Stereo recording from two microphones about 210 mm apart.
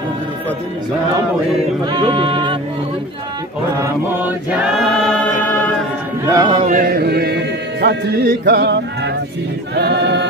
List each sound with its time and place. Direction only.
1.9 s a sound: 20° right (ahead or behind)
6.3 s music: 20° right (ahead or behind)
6.6 s speech: 40° right (ahead or behind); by 9.1 s 55° right (ahead or behind)
9.8 s choir: 55° right (ahead or behind)